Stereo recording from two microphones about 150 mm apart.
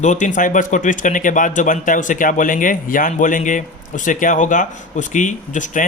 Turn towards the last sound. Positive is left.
turn(degrees=55)  # may be behind; listen again after turning